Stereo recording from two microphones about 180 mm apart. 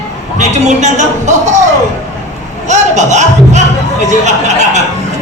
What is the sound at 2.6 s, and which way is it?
Speech, 40° right (ahead or behind).